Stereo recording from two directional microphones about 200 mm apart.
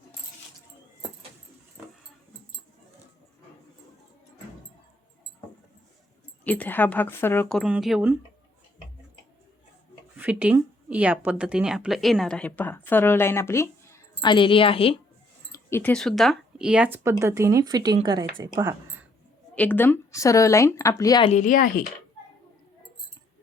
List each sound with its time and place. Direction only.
6.4 s a woman's voice: 10° left (ahead or behind)
10.2 s a woman's voice: 5° right (ahead or behind); by 14.9 s 25° left (ahead or behind)
15.5 s speech: 10° left (ahead or behind); by 19.0 s 15° right (ahead or behind)
19.5 s a woman's voice: 10° left (ahead or behind)
21.2 s speech: 40° left (ahead or behind)